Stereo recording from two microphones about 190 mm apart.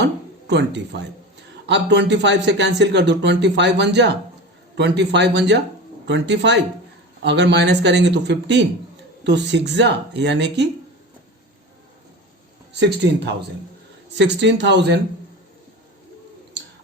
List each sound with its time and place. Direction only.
0.0 s speech: 65° right (ahead or behind)
12.8 s speech: 60° right (ahead or behind)